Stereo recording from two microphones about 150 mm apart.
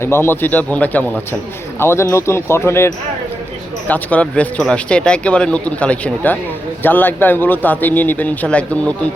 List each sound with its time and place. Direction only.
0.0 s speech: 15° left (ahead or behind)